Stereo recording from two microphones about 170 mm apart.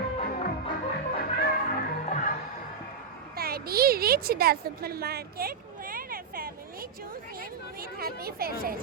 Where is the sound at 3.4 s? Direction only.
65° right (ahead or behind).